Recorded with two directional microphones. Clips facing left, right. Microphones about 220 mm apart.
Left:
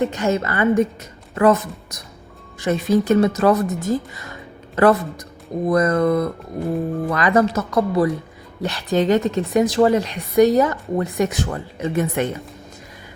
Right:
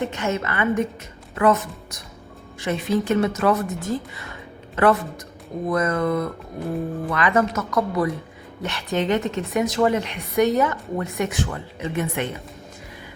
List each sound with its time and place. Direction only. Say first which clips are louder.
0.0 s a woman's voice: left 5 dB; 35° left (ahead or behind)